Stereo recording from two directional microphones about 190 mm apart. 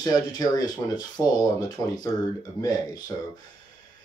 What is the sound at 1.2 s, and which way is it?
Speech, 10° left (ahead or behind).